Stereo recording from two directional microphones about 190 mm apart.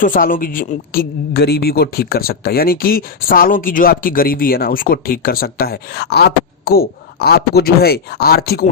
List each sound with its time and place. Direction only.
0.0 s speech: 45° left (ahead or behind)